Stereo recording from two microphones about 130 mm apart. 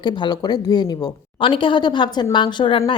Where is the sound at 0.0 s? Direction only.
35° left (ahead or behind).